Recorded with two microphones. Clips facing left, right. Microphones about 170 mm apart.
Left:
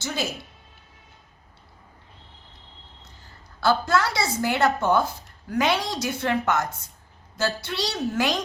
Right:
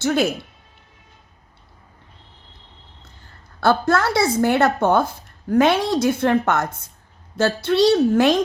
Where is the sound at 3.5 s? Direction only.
55° right (ahead or behind).